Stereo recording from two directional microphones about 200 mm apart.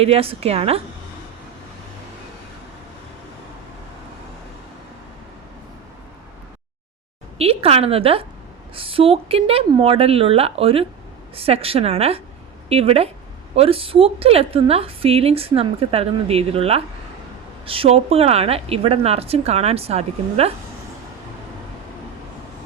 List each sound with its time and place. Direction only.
0.0 s a woman's voice: 30° right (ahead or behind)
7.3 s a woman's voice: 30° right (ahead or behind)